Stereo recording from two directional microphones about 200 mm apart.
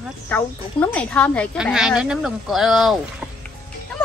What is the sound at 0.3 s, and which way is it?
Speech, 10° left (ahead or behind).